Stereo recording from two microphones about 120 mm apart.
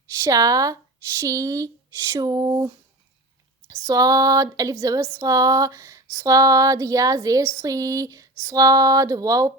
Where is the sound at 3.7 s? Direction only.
30° right (ahead or behind).